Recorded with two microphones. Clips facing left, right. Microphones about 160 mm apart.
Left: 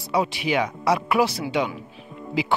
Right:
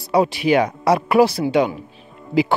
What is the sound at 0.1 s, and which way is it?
Speech, 40° right (ahead or behind).